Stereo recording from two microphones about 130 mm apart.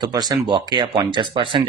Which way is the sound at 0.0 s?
30° right (ahead or behind).